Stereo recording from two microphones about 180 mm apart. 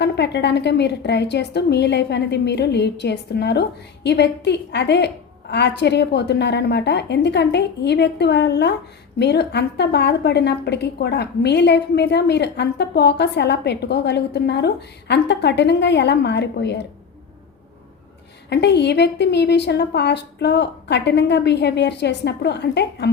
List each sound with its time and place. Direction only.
0.0 s a woman's voice: 70° left (ahead or behind)
18.4 s a woman's voice: 70° left (ahead or behind)